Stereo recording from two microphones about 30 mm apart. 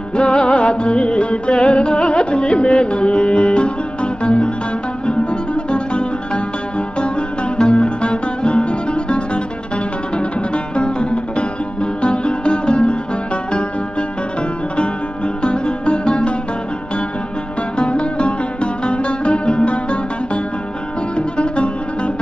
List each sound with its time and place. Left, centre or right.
0.1 s music: left
15.4 s music: left
17.7 s music: left
21.4 s music: left